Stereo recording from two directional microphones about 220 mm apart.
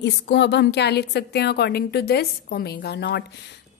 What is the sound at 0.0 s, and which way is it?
A woman's voice, 50° left (ahead or behind).